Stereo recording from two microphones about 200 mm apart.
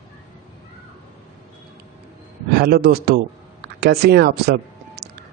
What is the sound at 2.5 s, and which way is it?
A man's voice, 50° right (ahead or behind).